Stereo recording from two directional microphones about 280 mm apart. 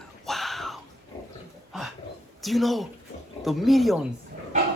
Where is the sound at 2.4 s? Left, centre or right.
Centre.